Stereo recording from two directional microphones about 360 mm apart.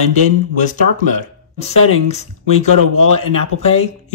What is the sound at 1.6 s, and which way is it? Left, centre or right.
Speech, centre.